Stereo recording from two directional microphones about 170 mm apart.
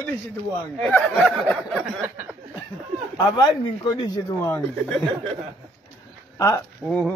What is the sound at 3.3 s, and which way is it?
Speech, 25° left (ahead or behind).